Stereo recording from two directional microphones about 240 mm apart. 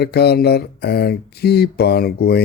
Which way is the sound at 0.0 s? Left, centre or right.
Left.